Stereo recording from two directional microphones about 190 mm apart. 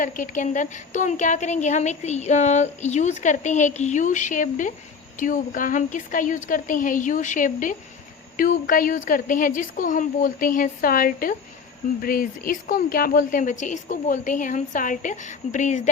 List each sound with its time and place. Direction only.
0.0 s a woman's voice: 40° left (ahead or behind)